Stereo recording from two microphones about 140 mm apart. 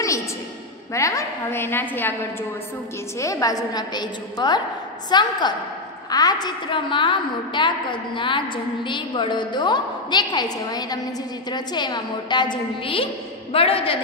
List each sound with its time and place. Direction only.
0.9 s a woman's voice: 20° left (ahead or behind)
3.2 s a woman's voice: 25° left (ahead or behind); by 13.9 s 40° left (ahead or behind)